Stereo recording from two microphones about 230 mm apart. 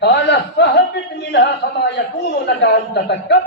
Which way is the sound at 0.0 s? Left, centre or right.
Left.